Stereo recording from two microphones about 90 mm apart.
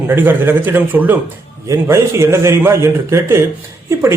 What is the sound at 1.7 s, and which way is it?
A man's voice, 30° right (ahead or behind).